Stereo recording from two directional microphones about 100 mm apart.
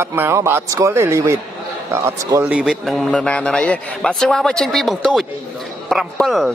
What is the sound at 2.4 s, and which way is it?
Speech, 10° right (ahead or behind).